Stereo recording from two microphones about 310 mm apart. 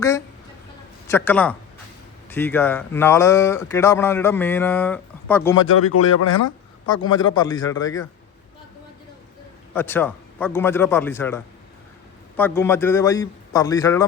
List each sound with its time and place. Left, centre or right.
1.0 s a man's voice: centre
5.7 s speech: left
7.1 s speech: centre
9.7 s speech: centre